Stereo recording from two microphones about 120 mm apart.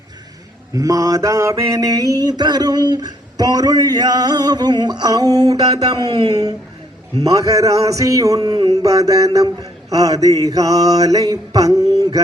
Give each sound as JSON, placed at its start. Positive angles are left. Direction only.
{"t": 0.7, "sound": "mantra", "side_deg": -30}